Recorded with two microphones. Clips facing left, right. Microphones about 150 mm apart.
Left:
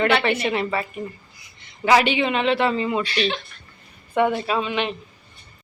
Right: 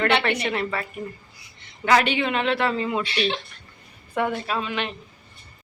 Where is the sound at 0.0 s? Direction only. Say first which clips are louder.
Left 2 dB; 5° left (ahead or behind).